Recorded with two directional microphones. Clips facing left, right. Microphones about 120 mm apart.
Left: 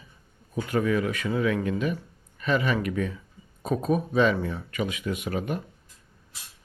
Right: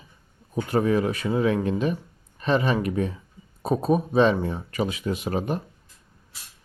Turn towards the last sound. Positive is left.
turn(degrees=-30)  # may be behind; listen again after turning